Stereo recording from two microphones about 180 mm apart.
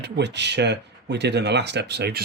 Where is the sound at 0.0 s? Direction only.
70° right (ahead or behind).